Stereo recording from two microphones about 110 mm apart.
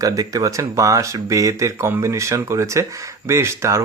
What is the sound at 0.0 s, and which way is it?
Speech, 30° right (ahead or behind).